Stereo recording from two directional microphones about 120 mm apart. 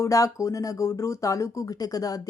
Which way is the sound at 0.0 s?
25° left (ahead or behind).